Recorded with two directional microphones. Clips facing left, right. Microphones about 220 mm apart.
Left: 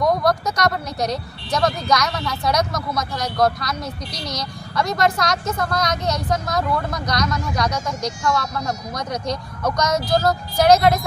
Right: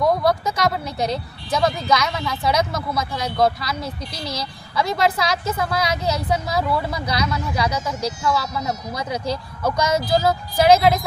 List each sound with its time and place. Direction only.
0.0 s speech: 5° right (ahead or behind)
3.8 s a woman's voice: 25° right (ahead or behind)
4.3 s speech: 5° right (ahead or behind)